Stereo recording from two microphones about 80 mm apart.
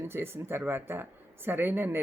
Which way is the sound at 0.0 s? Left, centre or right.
Right.